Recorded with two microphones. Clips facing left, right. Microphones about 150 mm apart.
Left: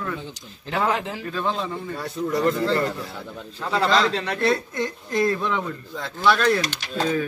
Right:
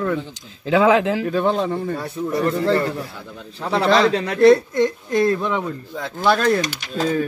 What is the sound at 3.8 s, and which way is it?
Speech, 65° right (ahead or behind).